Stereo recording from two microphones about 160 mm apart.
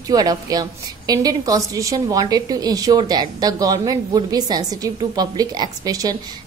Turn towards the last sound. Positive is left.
turn(degrees=-20)  # may be behind; listen again after turning